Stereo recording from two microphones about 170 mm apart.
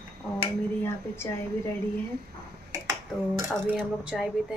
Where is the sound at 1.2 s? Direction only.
15° left (ahead or behind).